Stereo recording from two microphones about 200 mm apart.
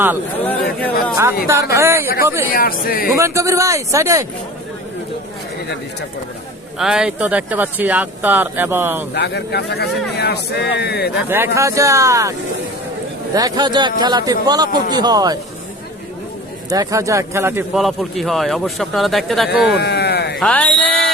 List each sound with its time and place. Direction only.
1.1 s speech: 15° right (ahead or behind)
2.5 s speech: 45° left (ahead or behind)
3.2 s speech: 15° right (ahead or behind)
6.7 s speech: 5° right (ahead or behind)
9.1 s speech: 55° left (ahead or behind)
11.3 s speech: 10° right (ahead or behind)
13.3 s a man's voice: 20° right (ahead or behind)
16.6 s speech: 20° right (ahead or behind)
17.8 s speech: centre (ahead or behind)
19.7 s chop: 55° left (ahead or behind)
20.4 s speech: 5° left (ahead or behind)